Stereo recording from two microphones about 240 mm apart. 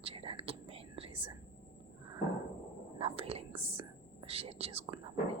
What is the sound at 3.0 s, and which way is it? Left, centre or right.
Whispering, right.